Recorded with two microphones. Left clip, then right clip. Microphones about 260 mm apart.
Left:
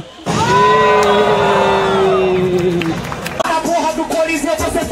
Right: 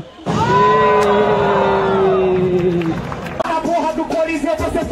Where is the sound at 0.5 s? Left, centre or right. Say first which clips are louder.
Left 2 dB; centre.